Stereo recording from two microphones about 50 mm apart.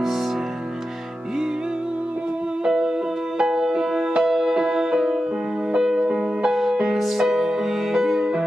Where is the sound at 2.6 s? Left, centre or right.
Centre.